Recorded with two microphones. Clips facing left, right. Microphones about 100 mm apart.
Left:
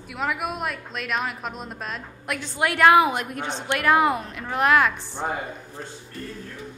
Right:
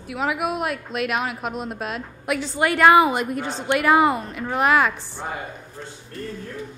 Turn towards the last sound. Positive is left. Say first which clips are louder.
# right 1 dB
turn(degrees=0)  # may be behind; listen again after turning